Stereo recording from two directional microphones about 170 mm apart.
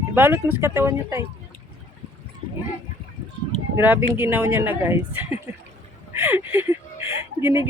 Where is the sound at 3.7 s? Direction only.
10° right (ahead or behind).